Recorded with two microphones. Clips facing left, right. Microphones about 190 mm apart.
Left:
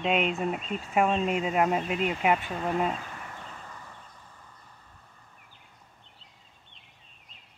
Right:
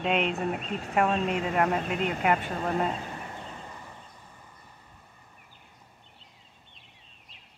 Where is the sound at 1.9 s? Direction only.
45° right (ahead or behind).